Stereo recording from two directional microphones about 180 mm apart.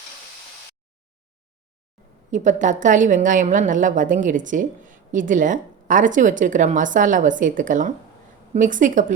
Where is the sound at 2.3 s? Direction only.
45° right (ahead or behind).